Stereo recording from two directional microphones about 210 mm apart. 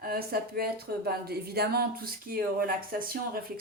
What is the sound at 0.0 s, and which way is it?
A woman's voice, 45° right (ahead or behind).